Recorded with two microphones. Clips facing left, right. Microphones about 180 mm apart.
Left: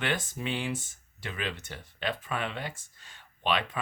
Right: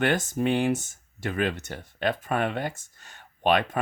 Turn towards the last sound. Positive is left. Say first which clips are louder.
# right 7 dB
turn(degrees=-50)  # may be behind; listen again after turning